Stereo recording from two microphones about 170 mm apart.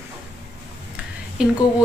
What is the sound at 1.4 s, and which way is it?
Speech, 5° right (ahead or behind).